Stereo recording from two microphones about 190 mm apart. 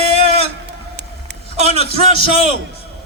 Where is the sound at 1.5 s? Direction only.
35° right (ahead or behind).